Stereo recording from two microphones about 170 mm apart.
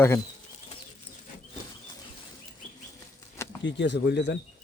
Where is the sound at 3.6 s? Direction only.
90° left.